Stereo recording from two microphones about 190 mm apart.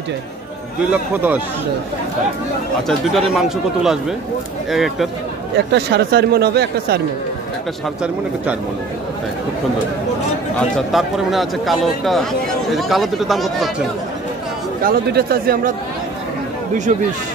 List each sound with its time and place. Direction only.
0.8 s speech: 10° right (ahead or behind)
2.9 s speech: centre (ahead or behind)
5.7 s speech: 60° right (ahead or behind)
10.6 s speech: centre (ahead or behind)
14.8 s speech: 50° right (ahead or behind)